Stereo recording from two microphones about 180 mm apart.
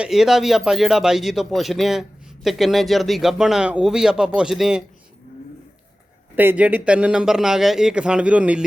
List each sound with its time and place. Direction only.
0.0 s speech: centre (ahead or behind)
6.3 s speech: 10° right (ahead or behind)